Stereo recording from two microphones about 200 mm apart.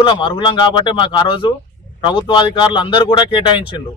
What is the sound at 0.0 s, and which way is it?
Speech, 25° left (ahead or behind).